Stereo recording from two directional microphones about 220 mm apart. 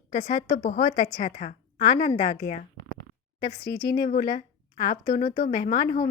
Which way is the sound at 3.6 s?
45° left (ahead or behind).